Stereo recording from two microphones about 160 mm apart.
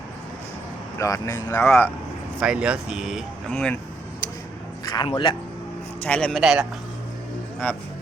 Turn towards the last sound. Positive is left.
turn(degrees=10)  # may be behind; listen again after turning